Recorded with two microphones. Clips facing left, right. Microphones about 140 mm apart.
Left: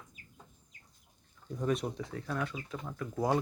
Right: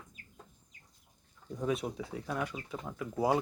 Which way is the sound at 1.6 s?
5° right (ahead or behind).